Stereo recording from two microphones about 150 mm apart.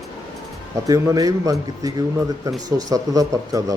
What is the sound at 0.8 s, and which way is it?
Speech, 25° right (ahead or behind).